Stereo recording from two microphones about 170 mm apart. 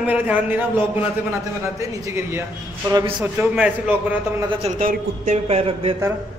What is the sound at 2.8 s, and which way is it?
Speech, 25° right (ahead or behind).